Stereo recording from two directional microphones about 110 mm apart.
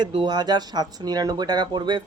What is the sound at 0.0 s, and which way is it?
Speech, 45° right (ahead or behind).